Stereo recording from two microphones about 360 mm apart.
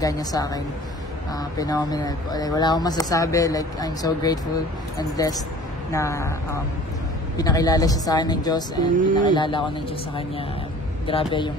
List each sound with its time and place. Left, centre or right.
0.0 s speech: centre
8.8 s speech: right
9.2 s speech: centre
11.1 s speech: centre